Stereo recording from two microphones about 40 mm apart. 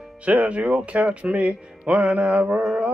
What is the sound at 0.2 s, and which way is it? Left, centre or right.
Music, right.